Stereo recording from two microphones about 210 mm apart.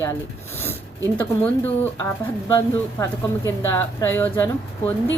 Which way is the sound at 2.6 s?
15° left (ahead or behind).